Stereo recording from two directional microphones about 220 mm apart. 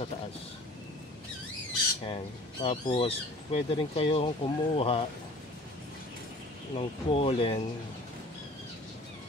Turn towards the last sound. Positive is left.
turn(degrees=25)  # may be behind; listen again after turning